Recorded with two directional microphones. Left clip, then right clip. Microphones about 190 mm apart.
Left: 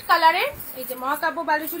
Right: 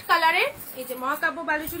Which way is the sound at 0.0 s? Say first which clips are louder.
Left 3 dB; 20° right (ahead or behind).